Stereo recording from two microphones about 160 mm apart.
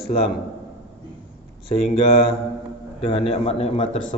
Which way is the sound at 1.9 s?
35° left (ahead or behind).